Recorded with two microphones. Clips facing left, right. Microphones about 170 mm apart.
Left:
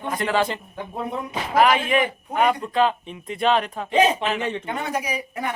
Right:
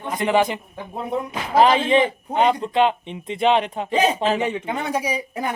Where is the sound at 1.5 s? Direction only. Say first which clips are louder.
Right 3 dB; 30° right (ahead or behind).